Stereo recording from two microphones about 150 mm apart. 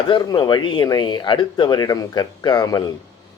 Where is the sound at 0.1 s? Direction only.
25° left (ahead or behind).